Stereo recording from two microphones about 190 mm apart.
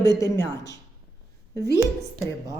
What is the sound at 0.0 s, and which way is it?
Speech, 15° left (ahead or behind).